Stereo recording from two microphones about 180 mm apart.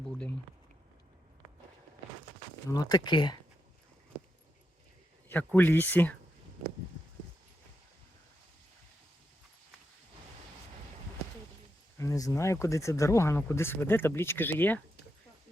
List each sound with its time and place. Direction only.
2.6 s speech: 20° left (ahead or behind)
5.3 s speech: 10° left (ahead or behind)
11.9 s speech: 20° left (ahead or behind)